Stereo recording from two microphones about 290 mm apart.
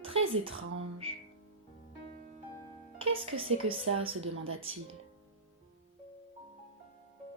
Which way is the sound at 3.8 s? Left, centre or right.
Right.